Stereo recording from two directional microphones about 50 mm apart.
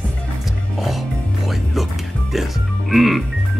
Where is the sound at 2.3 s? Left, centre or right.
Centre.